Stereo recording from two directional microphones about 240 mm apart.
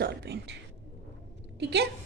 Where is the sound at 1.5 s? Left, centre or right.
Right.